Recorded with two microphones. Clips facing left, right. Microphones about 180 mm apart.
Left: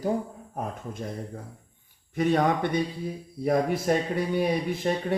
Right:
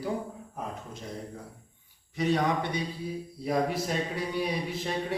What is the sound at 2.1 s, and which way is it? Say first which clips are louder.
Speech: left 4 dB; 50° left (ahead or behind).